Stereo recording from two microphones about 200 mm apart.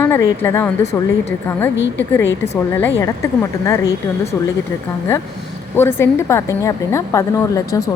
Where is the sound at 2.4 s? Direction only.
10° left (ahead or behind).